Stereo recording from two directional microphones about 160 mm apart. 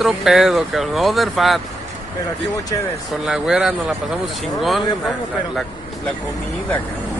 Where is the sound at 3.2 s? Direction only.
5° right (ahead or behind).